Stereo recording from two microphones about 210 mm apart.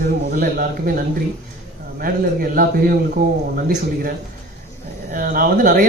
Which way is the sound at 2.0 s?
45° right (ahead or behind).